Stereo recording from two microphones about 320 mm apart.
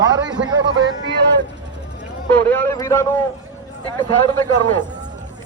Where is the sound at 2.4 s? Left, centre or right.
Centre.